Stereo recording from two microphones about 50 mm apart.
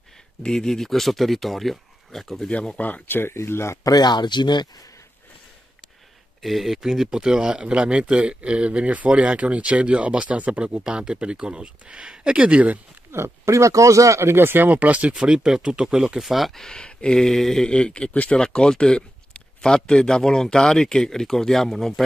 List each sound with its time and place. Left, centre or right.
0.4 s speech: centre
2.4 s speech: centre
2.8 s speech: left
3.3 s speech: left
6.4 s speech: centre; by 12.7 s right
13.1 s speech: right
14.3 s speech: right
15.2 s speech: centre
16.5 s speech: centre
17.6 s speech: centre